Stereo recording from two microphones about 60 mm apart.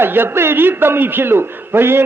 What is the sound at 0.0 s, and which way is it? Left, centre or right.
A man's voice, right.